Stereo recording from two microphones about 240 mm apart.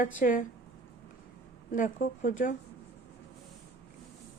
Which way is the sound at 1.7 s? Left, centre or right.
Left.